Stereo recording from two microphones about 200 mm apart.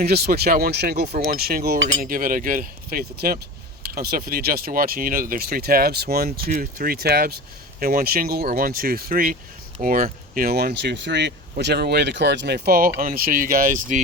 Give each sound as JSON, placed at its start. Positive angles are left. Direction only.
{"t": 0.0, "sound": "speech", "side_deg": -50}